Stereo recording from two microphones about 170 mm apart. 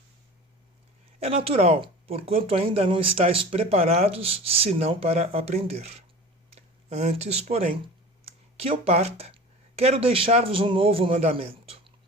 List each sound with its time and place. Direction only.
1.2 s speech: 35° right (ahead or behind)
8.2 s a sound: 35° right (ahead or behind)
8.8 s speech: 35° right (ahead or behind)